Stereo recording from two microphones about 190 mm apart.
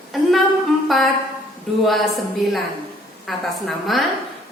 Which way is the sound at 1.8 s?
Centre (ahead or behind).